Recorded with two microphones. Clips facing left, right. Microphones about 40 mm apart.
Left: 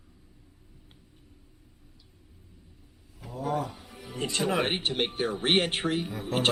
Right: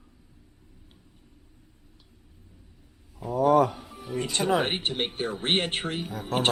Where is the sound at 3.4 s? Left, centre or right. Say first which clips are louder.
Right 10 dB; right.